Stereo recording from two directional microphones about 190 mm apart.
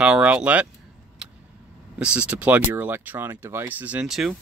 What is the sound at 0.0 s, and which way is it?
Speech, 5° right (ahead or behind).